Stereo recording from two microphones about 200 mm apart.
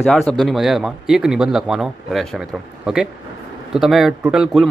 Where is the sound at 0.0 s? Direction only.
Centre (ahead or behind).